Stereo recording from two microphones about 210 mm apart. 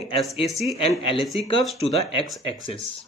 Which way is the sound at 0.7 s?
25° left (ahead or behind).